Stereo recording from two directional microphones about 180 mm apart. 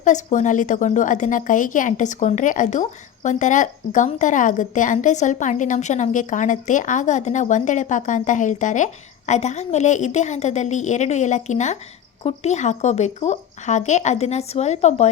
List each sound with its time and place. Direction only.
0.0 s a woman's voice: 40° left (ahead or behind)